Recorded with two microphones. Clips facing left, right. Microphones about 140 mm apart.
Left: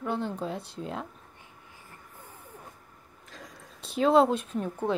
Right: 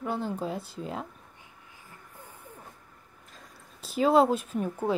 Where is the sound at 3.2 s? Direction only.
90° left.